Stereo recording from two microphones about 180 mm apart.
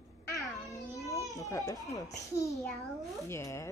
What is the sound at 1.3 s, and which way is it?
A woman's voice, 20° left (ahead or behind).